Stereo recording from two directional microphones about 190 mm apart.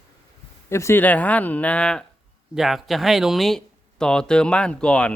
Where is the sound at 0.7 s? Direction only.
15° left (ahead or behind).